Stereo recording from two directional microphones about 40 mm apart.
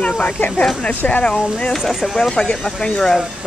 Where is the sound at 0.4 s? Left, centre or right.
Left.